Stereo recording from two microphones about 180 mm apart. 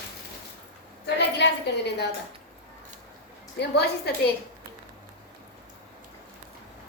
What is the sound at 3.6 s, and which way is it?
Speech, 65° left (ahead or behind).